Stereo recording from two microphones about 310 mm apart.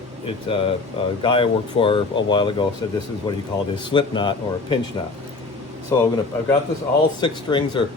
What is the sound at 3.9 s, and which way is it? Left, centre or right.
Speech, centre.